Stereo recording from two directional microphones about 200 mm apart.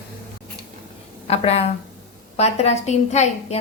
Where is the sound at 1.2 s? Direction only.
30° left (ahead or behind).